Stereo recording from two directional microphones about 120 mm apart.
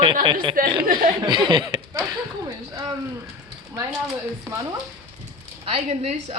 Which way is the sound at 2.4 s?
35° right (ahead or behind).